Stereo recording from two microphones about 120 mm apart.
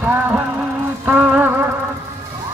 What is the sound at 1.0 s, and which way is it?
Music, 15° right (ahead or behind).